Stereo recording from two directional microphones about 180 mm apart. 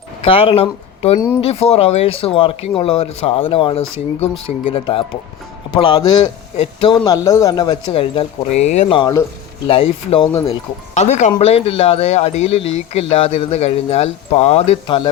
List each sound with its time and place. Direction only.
0.3 s speech: 30° left (ahead or behind)
10.9 s speech: 40° left (ahead or behind)